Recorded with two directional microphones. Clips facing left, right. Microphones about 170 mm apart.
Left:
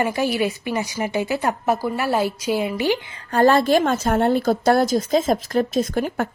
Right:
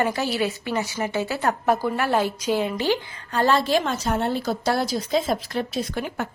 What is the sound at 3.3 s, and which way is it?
A woman's voice, 50° left (ahead or behind).